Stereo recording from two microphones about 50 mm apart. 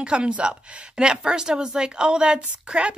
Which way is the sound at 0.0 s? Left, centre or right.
Centre.